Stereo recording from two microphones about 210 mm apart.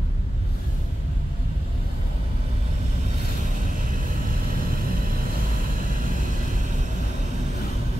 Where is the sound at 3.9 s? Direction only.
40° right (ahead or behind).